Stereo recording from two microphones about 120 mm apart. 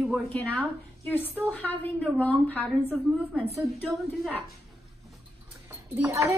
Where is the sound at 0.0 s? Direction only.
Centre (ahead or behind).